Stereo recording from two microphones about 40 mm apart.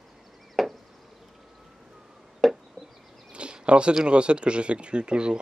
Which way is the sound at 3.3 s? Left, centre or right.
Right.